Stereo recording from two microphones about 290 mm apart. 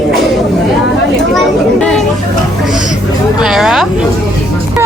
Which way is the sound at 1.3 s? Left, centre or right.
Centre.